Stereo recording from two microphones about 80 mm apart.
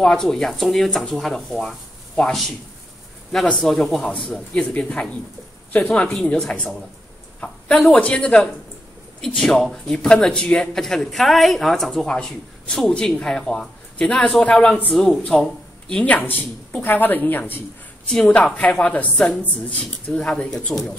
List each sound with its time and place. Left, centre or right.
0.0 s speech: centre
3.5 s speech: centre
4.7 s a man's voice: centre
18.0 s a man's voice: centre